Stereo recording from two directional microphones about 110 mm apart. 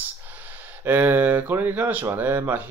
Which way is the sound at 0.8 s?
20° right (ahead or behind).